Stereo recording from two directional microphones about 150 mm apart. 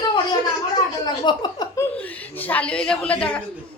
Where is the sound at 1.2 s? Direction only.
30° left (ahead or behind).